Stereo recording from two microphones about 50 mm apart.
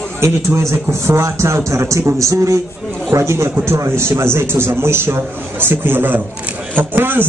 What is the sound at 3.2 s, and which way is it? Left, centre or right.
A man's voice, right.